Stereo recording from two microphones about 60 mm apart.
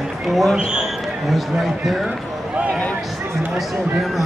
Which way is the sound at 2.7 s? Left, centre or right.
Left.